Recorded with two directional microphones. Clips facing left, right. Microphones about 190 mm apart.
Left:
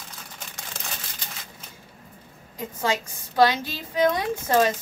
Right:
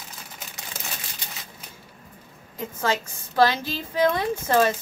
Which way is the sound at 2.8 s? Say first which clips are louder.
Even; 15° left (ahead or behind).